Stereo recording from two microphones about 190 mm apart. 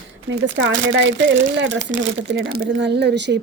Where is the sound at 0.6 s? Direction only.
75° right (ahead or behind).